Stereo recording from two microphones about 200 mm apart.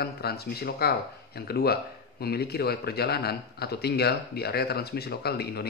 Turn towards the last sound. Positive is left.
turn(degrees=55)  # may be behind; listen again after turning